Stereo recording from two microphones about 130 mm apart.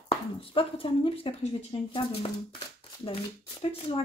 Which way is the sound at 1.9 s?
40° left (ahead or behind).